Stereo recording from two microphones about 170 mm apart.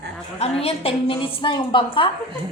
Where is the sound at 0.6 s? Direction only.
35° left (ahead or behind).